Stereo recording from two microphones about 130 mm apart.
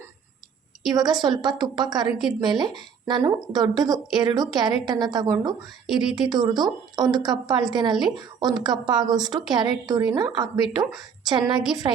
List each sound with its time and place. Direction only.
0.9 s a woman's voice: 30° right (ahead or behind)